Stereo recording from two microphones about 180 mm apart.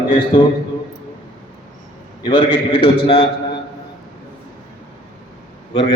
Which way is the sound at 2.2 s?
30° left (ahead or behind).